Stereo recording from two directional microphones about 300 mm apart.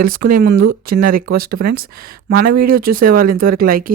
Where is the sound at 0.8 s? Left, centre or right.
Right.